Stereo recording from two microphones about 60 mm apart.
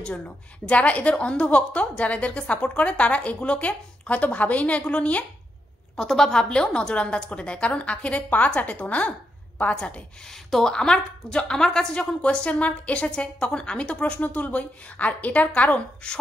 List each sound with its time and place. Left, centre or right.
0.7 s a woman's voice: left
5.9 s a woman's voice: centre